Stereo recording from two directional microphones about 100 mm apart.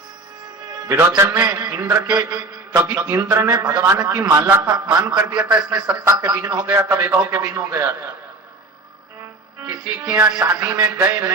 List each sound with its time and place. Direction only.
0.7 s music: 40° right (ahead or behind)
0.9 s a man's voice: 30° right (ahead or behind)
2.0 s a man's voice: 40° right (ahead or behind)
9.6 s a man's voice: 35° right (ahead or behind)
10.6 s a man's voice: 40° right (ahead or behind)